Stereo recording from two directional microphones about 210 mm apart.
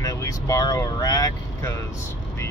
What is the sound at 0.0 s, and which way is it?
Speech, 15° left (ahead or behind).